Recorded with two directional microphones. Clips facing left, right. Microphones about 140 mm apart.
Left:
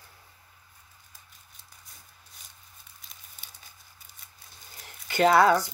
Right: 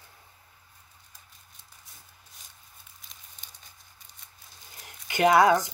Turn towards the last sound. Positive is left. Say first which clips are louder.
# even
turn(degrees=-15)  # may be behind; listen again after turning